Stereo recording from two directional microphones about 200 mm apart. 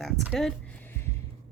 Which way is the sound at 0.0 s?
Centre (ahead or behind).